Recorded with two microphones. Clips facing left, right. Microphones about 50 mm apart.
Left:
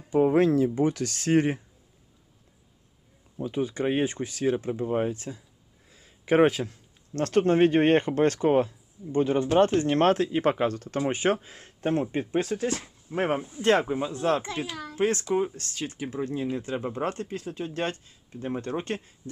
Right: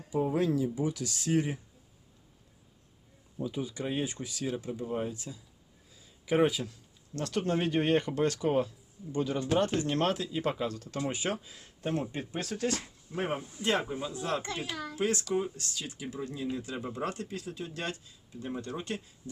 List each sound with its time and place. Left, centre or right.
0.1 s speech: left
3.3 s speech: left
10.8 s speech: left
11.1 s speech: left; by 13.1 s centre
13.6 s speech: left
14.4 s a child's voice: centre
14.9 s speech: left